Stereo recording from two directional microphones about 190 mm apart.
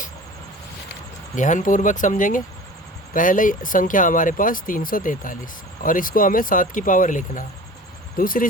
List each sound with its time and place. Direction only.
1.4 s speech: 40° left (ahead or behind)